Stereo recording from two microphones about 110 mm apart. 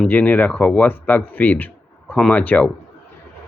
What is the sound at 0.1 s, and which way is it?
Speech, 15° left (ahead or behind).